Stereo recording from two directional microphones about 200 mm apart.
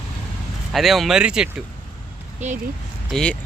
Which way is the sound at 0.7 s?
Centre (ahead or behind).